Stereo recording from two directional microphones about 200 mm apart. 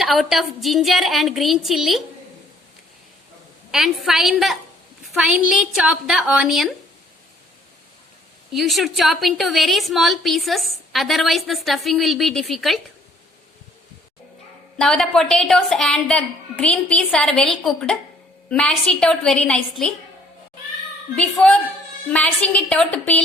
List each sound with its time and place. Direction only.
0.0 s a woman's voice: centre (ahead or behind)
3.7 s a woman's voice: centre (ahead or behind)
8.5 s a woman's voice: centre (ahead or behind)
14.8 s a woman's voice: 5° left (ahead or behind)
21.2 s a woman's voice: 5° left (ahead or behind)